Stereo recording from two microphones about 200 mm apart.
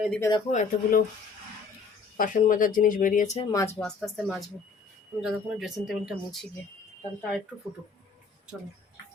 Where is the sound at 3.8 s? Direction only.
5° left (ahead or behind).